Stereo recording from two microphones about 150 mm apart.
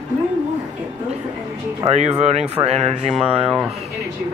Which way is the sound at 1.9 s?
50° right (ahead or behind).